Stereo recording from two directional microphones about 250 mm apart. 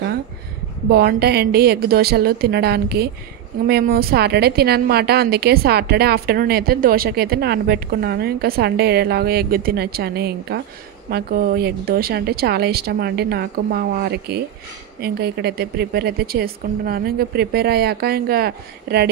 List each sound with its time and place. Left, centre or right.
0.9 s speech: right